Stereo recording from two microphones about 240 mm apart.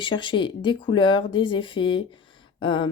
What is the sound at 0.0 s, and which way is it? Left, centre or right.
Speech, centre.